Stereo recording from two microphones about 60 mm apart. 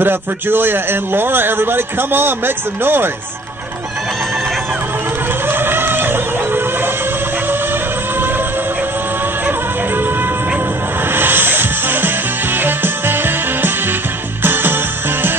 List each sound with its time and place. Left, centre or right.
0.0 s a man's voice: right
5.5 s music: right
11.1 s music: right